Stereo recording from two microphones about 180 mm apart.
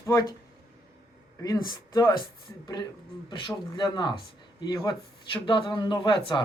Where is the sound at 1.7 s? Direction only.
20° left (ahead or behind).